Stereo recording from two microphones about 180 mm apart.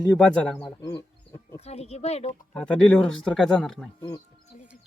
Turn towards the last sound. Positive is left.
turn(degrees=20)  # may be behind; listen again after turning